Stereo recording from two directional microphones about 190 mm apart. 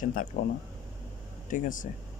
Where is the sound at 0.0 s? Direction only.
45° left (ahead or behind).